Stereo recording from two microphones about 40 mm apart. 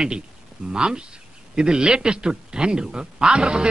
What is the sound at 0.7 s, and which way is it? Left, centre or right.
A man's voice, right.